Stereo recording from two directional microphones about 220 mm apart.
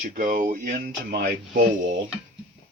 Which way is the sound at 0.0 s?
35° right (ahead or behind).